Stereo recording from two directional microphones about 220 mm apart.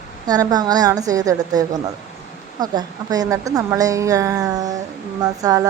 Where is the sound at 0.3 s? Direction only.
15° right (ahead or behind).